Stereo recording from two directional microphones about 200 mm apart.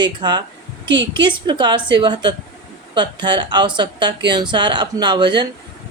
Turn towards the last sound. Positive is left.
turn(degrees=-25)  # may be behind; listen again after turning